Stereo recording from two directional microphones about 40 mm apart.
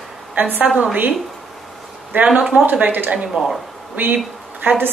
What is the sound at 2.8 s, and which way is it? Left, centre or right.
Speech, right.